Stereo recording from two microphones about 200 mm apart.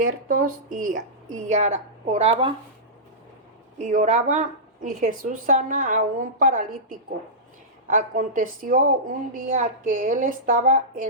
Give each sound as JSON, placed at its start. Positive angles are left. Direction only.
{"t": 0.0, "sound": "a woman's voice", "side_deg": -45}
{"t": 3.8, "sound": "a woman's voice", "side_deg": -40}